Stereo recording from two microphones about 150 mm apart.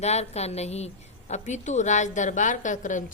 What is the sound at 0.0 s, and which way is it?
A woman's voice, 45° left (ahead or behind).